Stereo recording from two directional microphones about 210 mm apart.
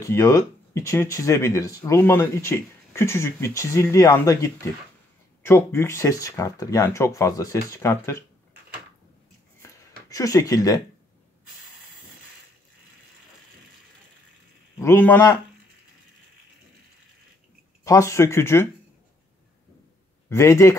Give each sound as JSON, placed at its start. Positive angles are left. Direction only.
{"t": 0.0, "sound": "speech", "side_deg": 15}
{"t": 9.6, "sound": "a sound", "side_deg": 15}
{"t": 14.8, "sound": "speech", "side_deg": 10}
{"t": 17.8, "sound": "speech", "side_deg": 15}
{"t": 20.2, "sound": "speech", "side_deg": 15}